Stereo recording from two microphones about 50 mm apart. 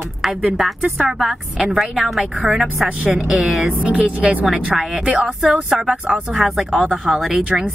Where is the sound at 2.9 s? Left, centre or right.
Centre.